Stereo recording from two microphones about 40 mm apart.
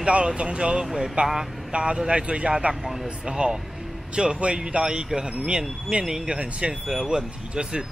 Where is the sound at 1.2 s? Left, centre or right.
Right.